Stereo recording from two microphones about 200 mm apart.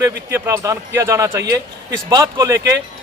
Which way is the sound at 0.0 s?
15° right (ahead or behind).